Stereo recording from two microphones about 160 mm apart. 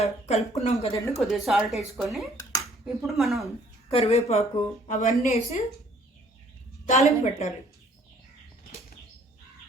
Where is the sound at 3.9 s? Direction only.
40° left (ahead or behind).